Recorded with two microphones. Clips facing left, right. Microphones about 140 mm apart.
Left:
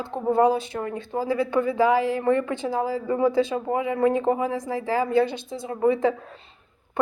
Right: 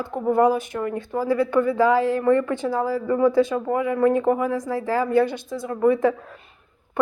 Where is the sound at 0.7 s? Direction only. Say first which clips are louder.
Right 3 dB; 40° left (ahead or behind).